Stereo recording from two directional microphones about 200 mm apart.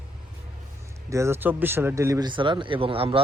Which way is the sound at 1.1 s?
15° right (ahead or behind).